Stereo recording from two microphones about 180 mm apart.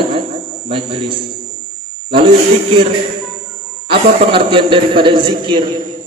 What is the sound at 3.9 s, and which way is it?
A man's voice, 30° right (ahead or behind).